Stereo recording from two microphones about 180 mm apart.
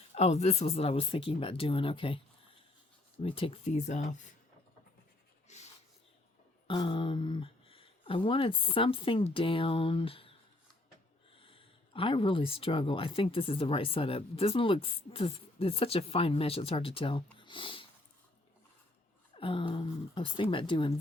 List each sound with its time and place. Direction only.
0.1 s speech: 35° left (ahead or behind)
5.5 s a sound: 40° left (ahead or behind)
6.7 s speech: 25° left (ahead or behind)
11.3 s speech: 30° left (ahead or behind)
19.4 s a woman's voice: 30° left (ahead or behind)